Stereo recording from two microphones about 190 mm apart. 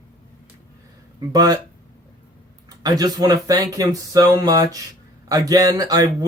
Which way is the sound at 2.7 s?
20° right (ahead or behind).